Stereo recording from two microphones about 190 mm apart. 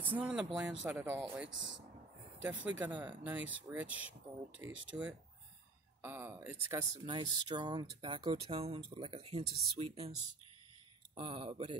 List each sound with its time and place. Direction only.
0.0 s speech: 5° right (ahead or behind)
2.5 s speech: 10° right (ahead or behind); by 10.1 s 30° right (ahead or behind)
11.1 s speech: 25° right (ahead or behind)